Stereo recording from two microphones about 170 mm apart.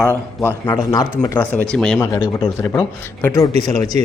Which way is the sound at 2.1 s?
25° left (ahead or behind).